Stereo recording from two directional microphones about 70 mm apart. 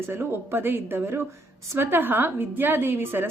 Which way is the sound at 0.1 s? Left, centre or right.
Right.